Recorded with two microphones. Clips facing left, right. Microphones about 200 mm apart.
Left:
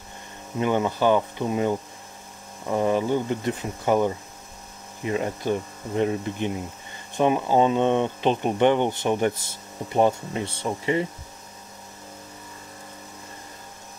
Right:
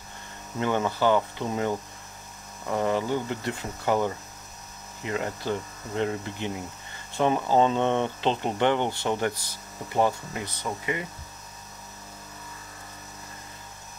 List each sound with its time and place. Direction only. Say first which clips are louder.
0.6 s speech: left 3 dB; 15° left (ahead or behind)